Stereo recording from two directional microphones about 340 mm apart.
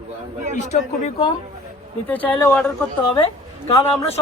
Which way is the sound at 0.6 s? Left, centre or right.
Centre.